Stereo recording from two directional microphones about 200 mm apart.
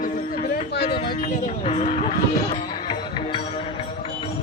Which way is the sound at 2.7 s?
20° left (ahead or behind).